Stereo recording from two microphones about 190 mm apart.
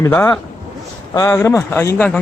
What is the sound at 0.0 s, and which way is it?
Speech, 10° left (ahead or behind).